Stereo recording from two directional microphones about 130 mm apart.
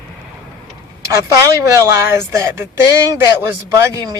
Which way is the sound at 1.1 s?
25° right (ahead or behind).